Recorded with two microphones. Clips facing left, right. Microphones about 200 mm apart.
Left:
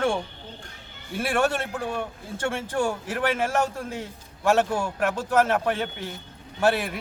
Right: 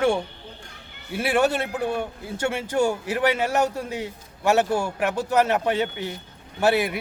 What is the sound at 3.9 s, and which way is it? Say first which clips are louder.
A man's voice: right 4 dB; 10° right (ahead or behind).